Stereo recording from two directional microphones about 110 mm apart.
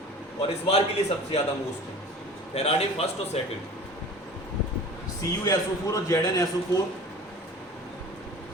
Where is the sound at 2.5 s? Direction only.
70° left (ahead or behind).